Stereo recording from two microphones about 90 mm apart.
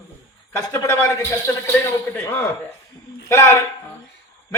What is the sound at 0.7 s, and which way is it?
A man's voice, 35° left (ahead or behind).